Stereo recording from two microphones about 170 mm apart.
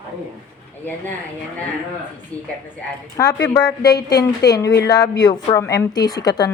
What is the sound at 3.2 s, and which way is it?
A woman's voice, 20° left (ahead or behind).